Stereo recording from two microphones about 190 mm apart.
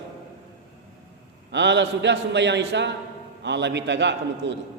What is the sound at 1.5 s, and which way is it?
A man's voice, 65° right (ahead or behind).